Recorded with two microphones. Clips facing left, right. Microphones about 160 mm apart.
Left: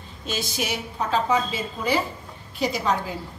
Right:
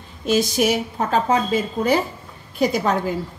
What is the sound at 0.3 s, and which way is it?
A woman's voice, 45° right (ahead or behind).